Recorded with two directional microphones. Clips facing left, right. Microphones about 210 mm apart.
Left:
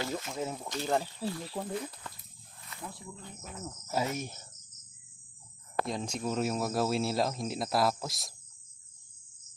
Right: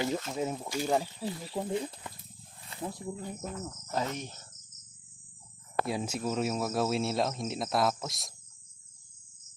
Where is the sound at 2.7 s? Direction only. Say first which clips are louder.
Right 7 dB; 40° right (ahead or behind).